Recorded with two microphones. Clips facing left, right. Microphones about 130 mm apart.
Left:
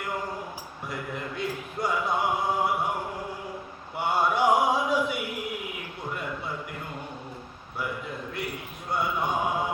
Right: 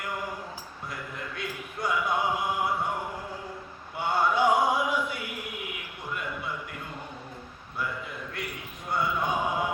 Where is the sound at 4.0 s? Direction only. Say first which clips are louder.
Left 1 dB; 20° left (ahead or behind).